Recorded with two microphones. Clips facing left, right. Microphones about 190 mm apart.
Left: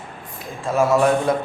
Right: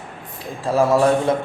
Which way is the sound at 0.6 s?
35° right (ahead or behind).